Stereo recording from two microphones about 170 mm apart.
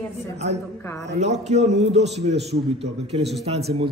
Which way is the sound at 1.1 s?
40° right (ahead or behind).